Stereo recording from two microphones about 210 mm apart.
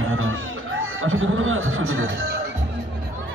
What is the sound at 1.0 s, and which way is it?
A man's voice, 70° right (ahead or behind).